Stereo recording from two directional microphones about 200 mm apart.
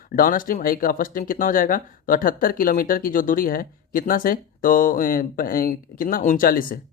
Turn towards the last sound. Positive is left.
turn(degrees=45)  # may be behind; listen again after turning